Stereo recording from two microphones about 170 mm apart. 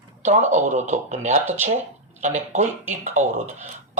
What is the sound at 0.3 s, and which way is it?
Speech, 45° right (ahead or behind).